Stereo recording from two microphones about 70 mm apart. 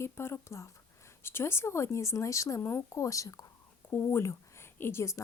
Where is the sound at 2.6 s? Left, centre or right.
Left.